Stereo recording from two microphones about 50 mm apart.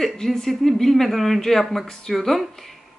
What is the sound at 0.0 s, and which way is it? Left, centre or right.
Speech, centre.